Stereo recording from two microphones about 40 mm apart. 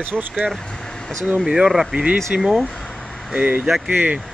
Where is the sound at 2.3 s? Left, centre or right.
Right.